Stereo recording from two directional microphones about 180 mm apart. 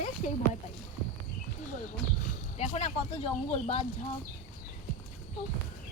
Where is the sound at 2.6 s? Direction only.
35° left (ahead or behind).